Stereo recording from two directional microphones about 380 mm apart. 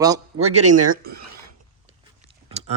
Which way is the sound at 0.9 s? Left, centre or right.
Right.